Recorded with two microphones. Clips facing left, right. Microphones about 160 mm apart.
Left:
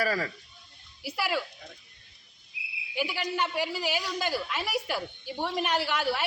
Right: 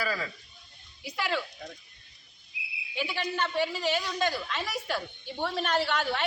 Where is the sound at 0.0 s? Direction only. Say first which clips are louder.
Left 4 dB; 45° left (ahead or behind).